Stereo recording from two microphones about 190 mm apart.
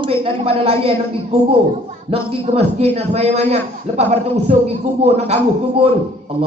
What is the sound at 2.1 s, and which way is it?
A man's voice, 30° right (ahead or behind).